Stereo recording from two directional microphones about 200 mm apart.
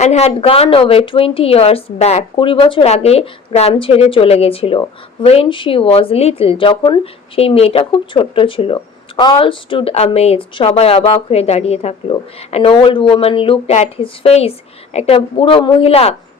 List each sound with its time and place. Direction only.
0.0 s a woman's voice: 35° left (ahead or behind)